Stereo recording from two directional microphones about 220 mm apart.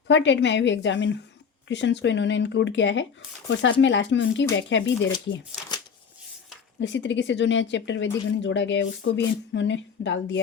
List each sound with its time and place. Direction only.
0.1 s speech: 55° left (ahead or behind)
6.7 s speech: 55° left (ahead or behind)